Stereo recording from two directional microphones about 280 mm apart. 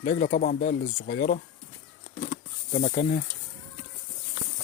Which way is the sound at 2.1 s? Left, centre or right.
Left.